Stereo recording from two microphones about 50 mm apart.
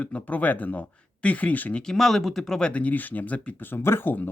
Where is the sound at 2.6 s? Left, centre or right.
Left.